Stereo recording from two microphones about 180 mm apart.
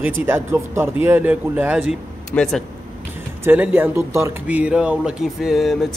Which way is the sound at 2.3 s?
Centre (ahead or behind).